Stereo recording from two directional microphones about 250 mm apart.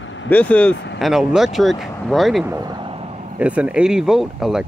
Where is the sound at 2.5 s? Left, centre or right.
Centre.